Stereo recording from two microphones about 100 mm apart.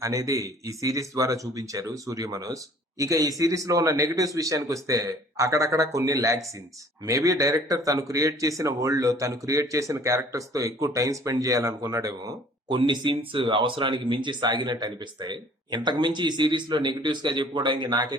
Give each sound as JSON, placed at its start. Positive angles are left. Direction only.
{"t": 0.0, "sound": "speech", "side_deg": -35}
{"t": 12.7, "sound": "speech", "side_deg": -50}